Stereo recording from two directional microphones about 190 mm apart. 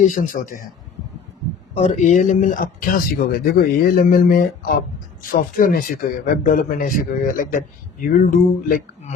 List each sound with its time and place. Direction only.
0.0 s a man's voice: 40° left (ahead or behind)
1.7 s speech: 40° left (ahead or behind)